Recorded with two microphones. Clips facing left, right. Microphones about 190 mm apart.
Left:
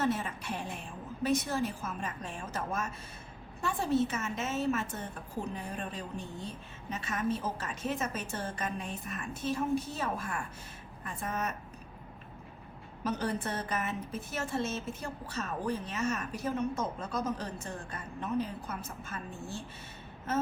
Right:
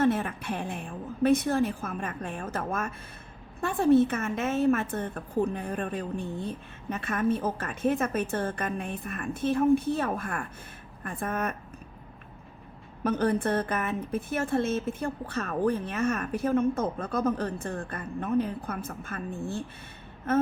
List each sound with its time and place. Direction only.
0.0 s speech: 55° right (ahead or behind)
13.1 s speech: 55° right (ahead or behind)